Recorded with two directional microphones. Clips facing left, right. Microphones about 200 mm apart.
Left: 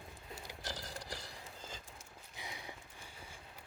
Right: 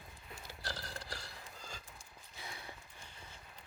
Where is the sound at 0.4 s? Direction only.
15° left (ahead or behind).